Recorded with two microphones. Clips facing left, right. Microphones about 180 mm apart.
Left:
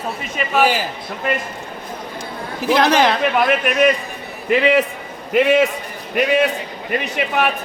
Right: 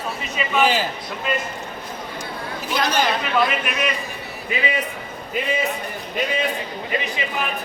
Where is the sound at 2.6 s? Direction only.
90° left.